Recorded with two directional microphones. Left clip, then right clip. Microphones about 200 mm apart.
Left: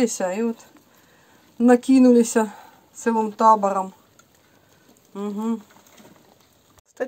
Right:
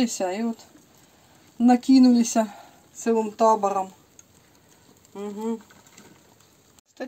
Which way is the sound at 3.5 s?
25° left (ahead or behind).